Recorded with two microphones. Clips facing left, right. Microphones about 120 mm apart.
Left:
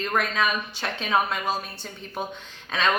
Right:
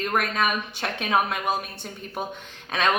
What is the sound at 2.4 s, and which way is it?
Speech, 50° right (ahead or behind).